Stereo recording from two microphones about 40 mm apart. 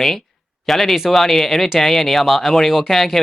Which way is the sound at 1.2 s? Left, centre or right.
Centre.